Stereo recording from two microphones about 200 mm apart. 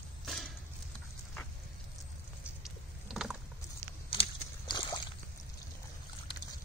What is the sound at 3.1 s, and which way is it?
Mechanisms, centre (ahead or behind).